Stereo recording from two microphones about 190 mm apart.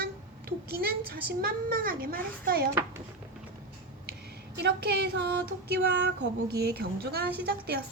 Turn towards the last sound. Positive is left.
turn(degrees=-55)  # may be behind; listen again after turning